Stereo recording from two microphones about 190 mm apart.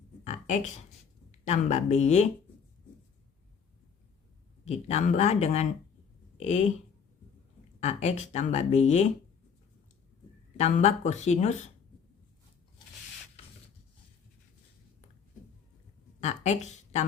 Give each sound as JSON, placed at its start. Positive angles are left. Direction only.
{"t": 0.3, "sound": "a sound", "side_deg": 40}
{"t": 1.3, "sound": "speech", "side_deg": 35}
{"t": 4.6, "sound": "speech", "side_deg": 35}
{"t": 7.8, "sound": "speech", "side_deg": 35}
{"t": 10.6, "sound": "speech", "side_deg": 35}
{"t": 16.2, "sound": "speech", "side_deg": 35}